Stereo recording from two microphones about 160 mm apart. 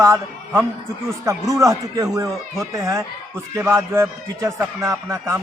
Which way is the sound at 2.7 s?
20° right (ahead or behind).